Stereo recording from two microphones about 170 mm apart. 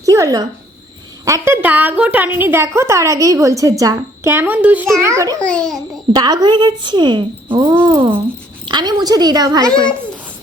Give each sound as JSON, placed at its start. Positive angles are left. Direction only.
{"t": 0.0, "sound": "a sound", "side_deg": -20}
{"t": 1.2, "sound": "a woman's voice", "side_deg": -15}
{"t": 5.4, "sound": "a child's voice", "side_deg": 5}
{"t": 6.1, "sound": "speech", "side_deg": -25}